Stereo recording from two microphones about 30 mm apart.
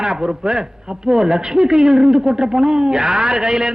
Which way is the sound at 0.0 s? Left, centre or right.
Right.